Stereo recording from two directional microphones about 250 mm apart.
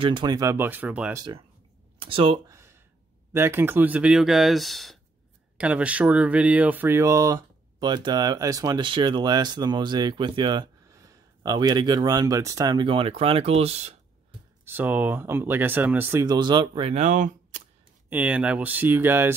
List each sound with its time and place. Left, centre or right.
0.0 s speech: centre
2.0 s a sound: right
3.3 s speech: centre; by 13.9 s right
14.6 s speech: centre; by 17.4 s right
18.1 s speech: centre